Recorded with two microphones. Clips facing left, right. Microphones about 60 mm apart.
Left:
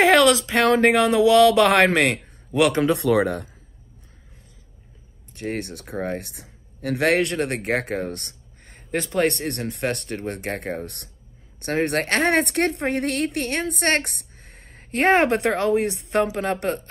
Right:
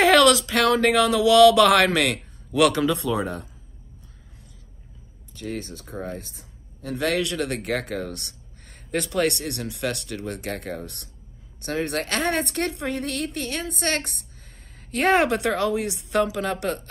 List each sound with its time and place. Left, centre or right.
0.0 s speech: left
2.9 s speech: left
5.3 s speech: left
8.6 s speech: left